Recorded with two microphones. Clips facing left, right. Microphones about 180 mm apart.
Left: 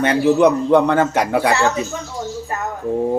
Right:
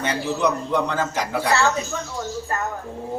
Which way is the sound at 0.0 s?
60° left (ahead or behind).